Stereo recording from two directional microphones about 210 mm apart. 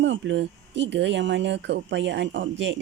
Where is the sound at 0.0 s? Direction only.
60° right (ahead or behind).